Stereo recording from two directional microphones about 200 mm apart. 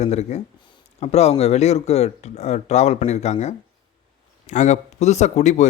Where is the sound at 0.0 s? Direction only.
35° left (ahead or behind).